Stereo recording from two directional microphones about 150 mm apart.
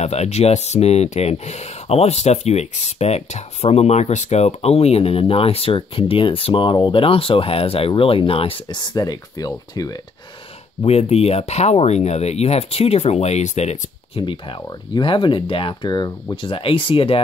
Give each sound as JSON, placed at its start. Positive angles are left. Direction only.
{"t": 0.0, "sound": "speech", "side_deg": 45}
{"t": 10.8, "sound": "speech", "side_deg": 45}